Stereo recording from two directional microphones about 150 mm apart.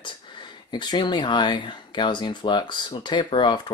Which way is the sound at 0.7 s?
30° left (ahead or behind).